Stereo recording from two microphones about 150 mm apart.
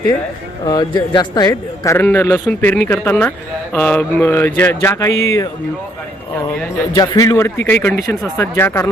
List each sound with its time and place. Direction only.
0.6 s a man's voice: 30° left (ahead or behind)
6.9 s a man's voice: 25° left (ahead or behind)